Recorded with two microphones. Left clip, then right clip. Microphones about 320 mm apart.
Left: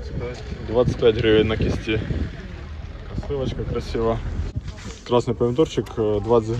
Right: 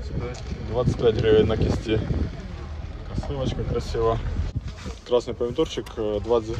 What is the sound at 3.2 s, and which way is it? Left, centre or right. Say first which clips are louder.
Speech: left 3 dB; centre.